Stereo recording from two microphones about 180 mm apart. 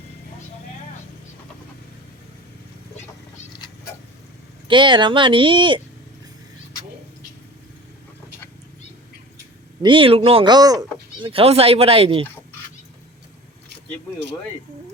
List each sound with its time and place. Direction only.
4.7 s speech: 25° right (ahead or behind)
9.8 s speech: 30° right (ahead or behind)